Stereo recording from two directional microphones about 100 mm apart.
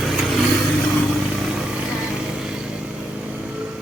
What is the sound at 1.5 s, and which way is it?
Vehicle, 10° right (ahead or behind).